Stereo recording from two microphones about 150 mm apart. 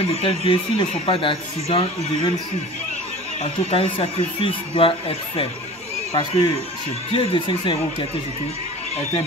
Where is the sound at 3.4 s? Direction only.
40° left (ahead or behind).